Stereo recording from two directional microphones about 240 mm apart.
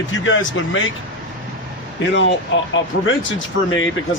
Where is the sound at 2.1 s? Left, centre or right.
Left.